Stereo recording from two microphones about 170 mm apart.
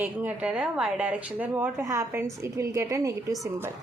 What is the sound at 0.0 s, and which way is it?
A woman's voice, 10° right (ahead or behind).